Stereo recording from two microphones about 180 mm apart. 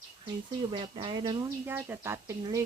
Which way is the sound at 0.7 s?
25° right (ahead or behind).